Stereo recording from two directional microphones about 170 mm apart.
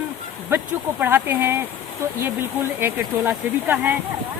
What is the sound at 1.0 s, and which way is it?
Speech, 10° right (ahead or behind).